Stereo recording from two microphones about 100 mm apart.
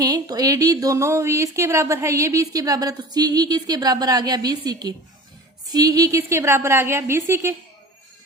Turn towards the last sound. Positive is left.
turn(degrees=-25)  # may be behind; listen again after turning